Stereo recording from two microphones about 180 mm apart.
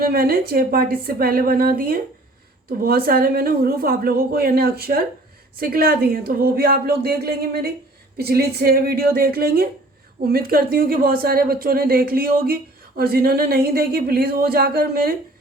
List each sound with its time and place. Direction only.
0.0 s a woman's voice: 60° right (ahead or behind)